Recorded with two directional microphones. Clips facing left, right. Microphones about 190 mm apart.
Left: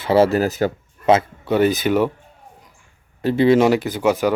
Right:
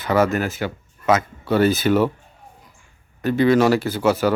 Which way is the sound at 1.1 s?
25° left (ahead or behind).